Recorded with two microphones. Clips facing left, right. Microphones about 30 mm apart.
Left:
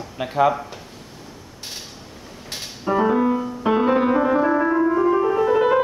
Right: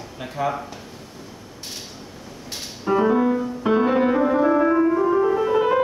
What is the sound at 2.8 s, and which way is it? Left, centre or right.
Music, centre.